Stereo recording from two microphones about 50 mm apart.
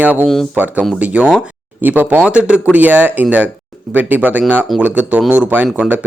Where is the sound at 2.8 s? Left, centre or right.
Right.